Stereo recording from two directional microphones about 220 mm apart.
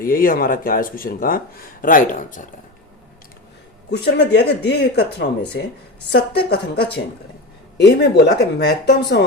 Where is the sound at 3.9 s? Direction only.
50° left (ahead or behind).